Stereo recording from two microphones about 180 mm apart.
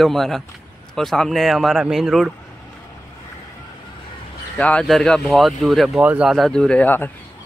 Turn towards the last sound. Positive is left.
turn(degrees=10)  # may be behind; listen again after turning